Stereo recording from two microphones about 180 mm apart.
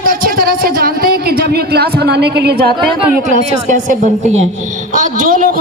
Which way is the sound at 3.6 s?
45° right (ahead or behind).